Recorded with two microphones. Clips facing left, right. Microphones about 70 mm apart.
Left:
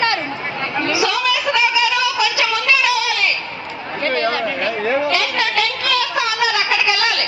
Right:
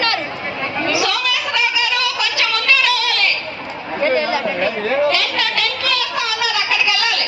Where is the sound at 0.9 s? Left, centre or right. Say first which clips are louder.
Left 1 dB; centre.